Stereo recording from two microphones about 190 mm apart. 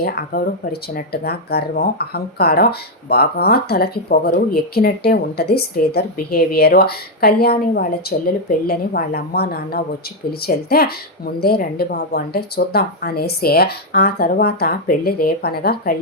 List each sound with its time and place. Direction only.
0.0 s speech: 50° left (ahead or behind)